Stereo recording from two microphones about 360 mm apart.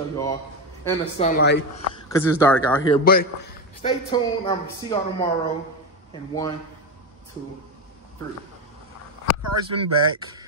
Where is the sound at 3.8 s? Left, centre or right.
Centre.